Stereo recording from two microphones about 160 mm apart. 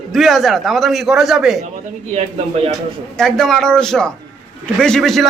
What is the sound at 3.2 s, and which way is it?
A man's voice, 5° left (ahead or behind).